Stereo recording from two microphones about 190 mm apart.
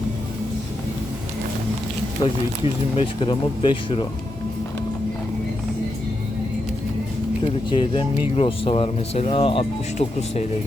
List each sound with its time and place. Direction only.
2.2 s speech: 20° left (ahead or behind)
7.4 s speech: 25° left (ahead or behind)